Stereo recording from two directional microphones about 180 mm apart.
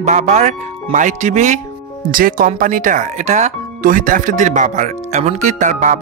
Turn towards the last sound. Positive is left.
turn(degrees=-45)  # may be behind; listen again after turning